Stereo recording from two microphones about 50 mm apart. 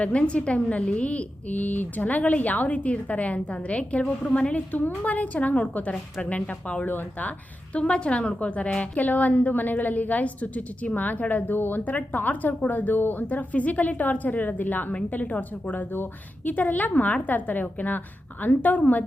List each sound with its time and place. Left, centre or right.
0.0 s a woman's voice: left
5.9 s a woman's voice: centre
6.3 s a woman's voice: left
13.2 s a woman's voice: left